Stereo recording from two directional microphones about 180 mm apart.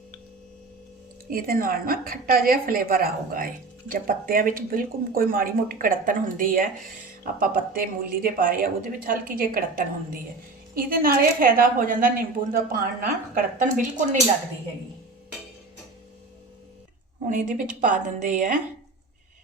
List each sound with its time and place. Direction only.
1.3 s a woman's voice: 55° right (ahead or behind)
17.3 s a woman's voice: 45° right (ahead or behind)